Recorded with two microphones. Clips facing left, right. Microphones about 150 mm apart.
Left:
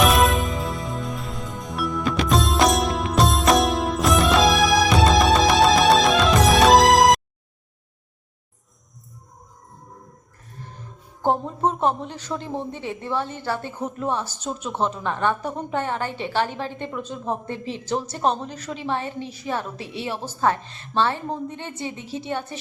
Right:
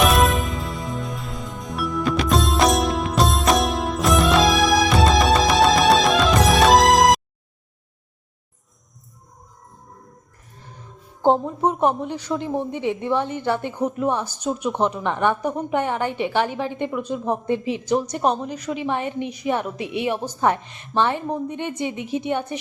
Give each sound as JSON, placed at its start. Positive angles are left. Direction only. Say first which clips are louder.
{"t": 0.0, "sound": "music", "louder": "even", "side_deg": 0}
{"t": 11.2, "sound": "speech", "louder": "right 3 dB", "side_deg": -15}